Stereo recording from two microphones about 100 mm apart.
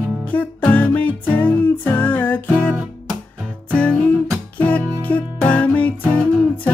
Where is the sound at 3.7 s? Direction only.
10° left (ahead or behind).